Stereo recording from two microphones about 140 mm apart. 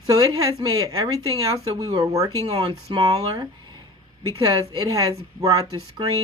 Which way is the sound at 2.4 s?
45° right (ahead or behind).